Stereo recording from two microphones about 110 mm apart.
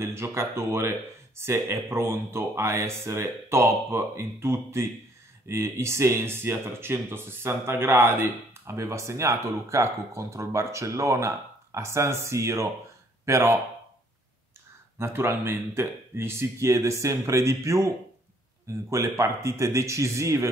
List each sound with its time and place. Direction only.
0.0 s speech: 25° right (ahead or behind)
15.0 s speech: 25° right (ahead or behind)